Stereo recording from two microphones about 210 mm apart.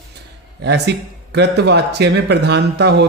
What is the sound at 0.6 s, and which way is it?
A man's voice, 50° right (ahead or behind).